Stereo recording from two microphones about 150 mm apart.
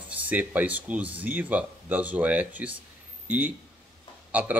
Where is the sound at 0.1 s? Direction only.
10° right (ahead or behind).